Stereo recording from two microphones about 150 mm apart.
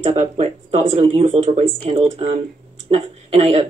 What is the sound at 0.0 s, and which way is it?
Speech, 40° right (ahead or behind).